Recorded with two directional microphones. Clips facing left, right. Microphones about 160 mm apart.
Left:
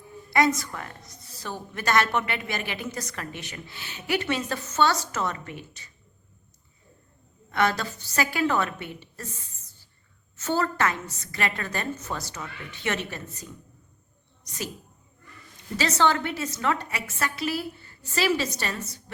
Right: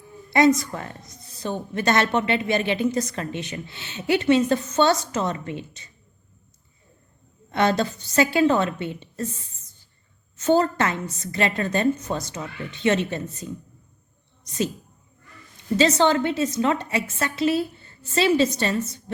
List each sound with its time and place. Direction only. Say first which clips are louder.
0.3 s a woman's voice: right 5 dB; 20° right (ahead or behind)
7.5 s a woman's voice: right 4 dB; 25° right (ahead or behind)
15.8 s a woman's voice: right 5 dB; 20° right (ahead or behind)